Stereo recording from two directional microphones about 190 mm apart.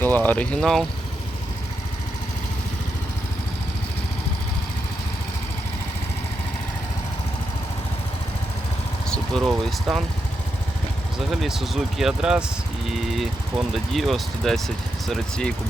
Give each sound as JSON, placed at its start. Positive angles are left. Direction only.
{"t": 0.0, "sound": "speech", "side_deg": 10}
{"t": 9.0, "sound": "speech", "side_deg": 5}
{"t": 11.3, "sound": "speech", "side_deg": 0}